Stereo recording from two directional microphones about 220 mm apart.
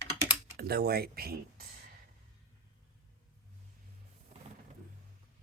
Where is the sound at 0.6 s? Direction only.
45° right (ahead or behind).